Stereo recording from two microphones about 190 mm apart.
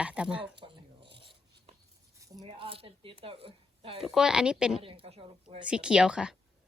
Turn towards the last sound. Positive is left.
turn(degrees=-5)  # may be behind; listen again after turning